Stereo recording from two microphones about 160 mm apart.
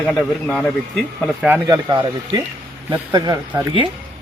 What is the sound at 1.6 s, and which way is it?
Speech, 25° right (ahead or behind).